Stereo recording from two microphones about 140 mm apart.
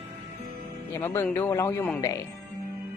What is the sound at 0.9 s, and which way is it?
Speech, 20° left (ahead or behind).